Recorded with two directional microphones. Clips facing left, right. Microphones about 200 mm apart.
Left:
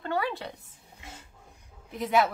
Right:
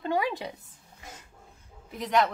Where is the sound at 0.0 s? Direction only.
15° right (ahead or behind).